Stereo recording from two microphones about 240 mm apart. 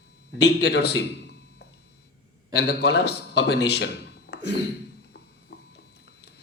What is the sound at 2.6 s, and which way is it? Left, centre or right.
A man's voice, left.